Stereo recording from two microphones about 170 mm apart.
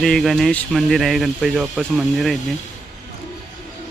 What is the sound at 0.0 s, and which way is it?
Speech, centre (ahead or behind).